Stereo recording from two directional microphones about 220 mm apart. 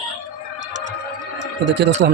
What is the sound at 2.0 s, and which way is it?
Speech, 45° right (ahead or behind).